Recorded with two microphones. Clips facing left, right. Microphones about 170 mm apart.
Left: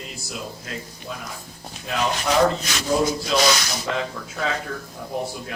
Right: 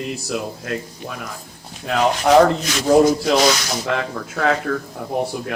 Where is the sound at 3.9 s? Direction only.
60° right (ahead or behind).